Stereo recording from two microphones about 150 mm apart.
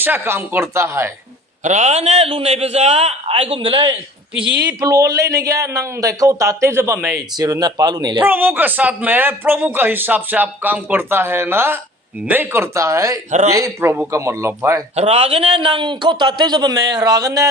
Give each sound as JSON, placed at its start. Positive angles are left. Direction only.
{"t": 0.0, "sound": "a man's voice", "side_deg": -15}
{"t": 1.6, "sound": "a man's voice", "side_deg": -50}
{"t": 4.8, "sound": "a man's voice", "side_deg": -25}
{"t": 8.2, "sound": "a man's voice", "side_deg": -10}
{"t": 14.9, "sound": "a man's voice", "side_deg": -45}